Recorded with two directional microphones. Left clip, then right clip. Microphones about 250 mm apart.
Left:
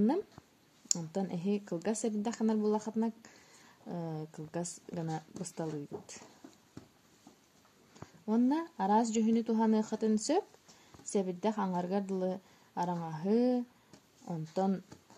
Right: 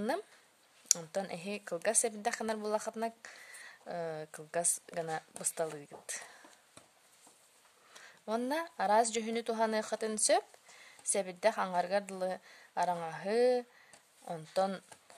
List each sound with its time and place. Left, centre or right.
0.8 s a woman's voice: right
7.9 s a woman's voice: right